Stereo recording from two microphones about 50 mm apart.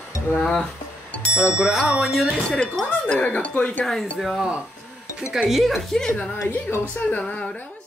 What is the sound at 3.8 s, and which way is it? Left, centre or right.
Speech, centre.